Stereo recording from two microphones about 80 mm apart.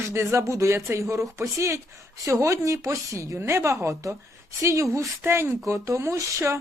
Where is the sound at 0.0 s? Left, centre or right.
Right.